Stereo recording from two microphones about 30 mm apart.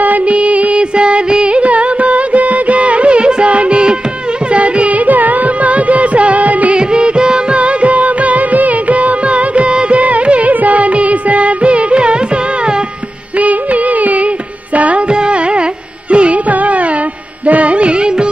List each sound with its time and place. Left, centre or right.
0.2 s music: right
0.9 s music: right
1.6 s music: right
4.5 s carnatic music: right
6.7 s music: right
7.5 s music: right
10.5 s music of bollywood: right
13.4 s music: right
15.0 s music: right
16.4 s music: right